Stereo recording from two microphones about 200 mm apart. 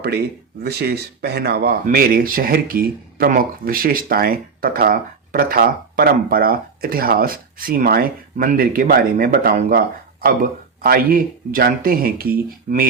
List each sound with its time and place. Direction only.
0.0 s speech: 55° right (ahead or behind)